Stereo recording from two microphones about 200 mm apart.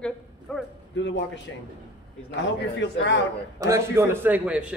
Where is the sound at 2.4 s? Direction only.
60° left (ahead or behind).